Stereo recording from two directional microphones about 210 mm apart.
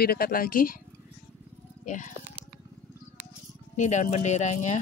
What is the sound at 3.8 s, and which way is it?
Speech, 35° left (ahead or behind).